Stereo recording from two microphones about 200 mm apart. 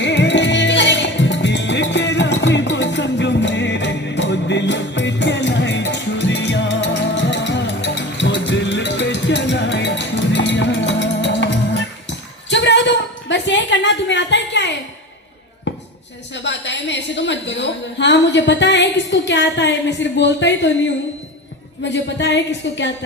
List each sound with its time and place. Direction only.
0.0 s music: 65° left (ahead or behind)
16.3 s a sound: 65° left (ahead or behind)
21.8 s a woman's voice: 60° left (ahead or behind)